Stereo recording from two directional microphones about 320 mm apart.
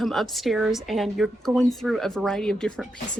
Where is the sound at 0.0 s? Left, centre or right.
Centre.